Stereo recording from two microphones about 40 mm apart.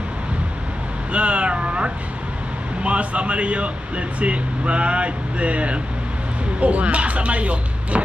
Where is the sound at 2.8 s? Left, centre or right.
Right.